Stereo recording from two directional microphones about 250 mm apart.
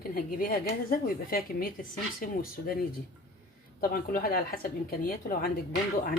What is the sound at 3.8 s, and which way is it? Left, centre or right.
Speech, left.